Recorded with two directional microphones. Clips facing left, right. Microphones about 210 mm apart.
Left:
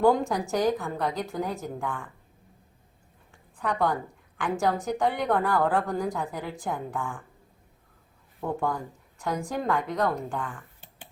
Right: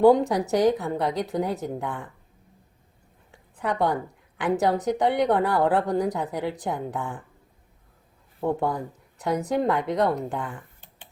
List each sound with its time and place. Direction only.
0.0 s a woman's voice: 20° right (ahead or behind)
3.3 s a sound: 20° right (ahead or behind)
4.4 s a woman's voice: 20° right (ahead or behind)
8.4 s a woman's voice: 20° right (ahead or behind)